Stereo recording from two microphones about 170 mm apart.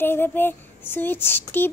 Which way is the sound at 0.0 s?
15° left (ahead or behind).